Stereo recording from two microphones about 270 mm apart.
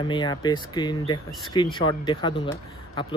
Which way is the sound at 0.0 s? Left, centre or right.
Centre.